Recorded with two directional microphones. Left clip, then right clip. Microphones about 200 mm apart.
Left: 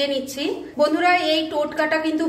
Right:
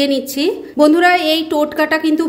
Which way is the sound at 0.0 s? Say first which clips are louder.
Right 7 dB; 55° right (ahead or behind).